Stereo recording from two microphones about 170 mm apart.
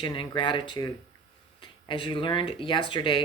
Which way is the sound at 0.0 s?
25° left (ahead or behind).